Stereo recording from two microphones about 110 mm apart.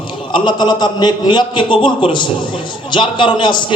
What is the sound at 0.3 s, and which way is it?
A man's voice, 40° left (ahead or behind).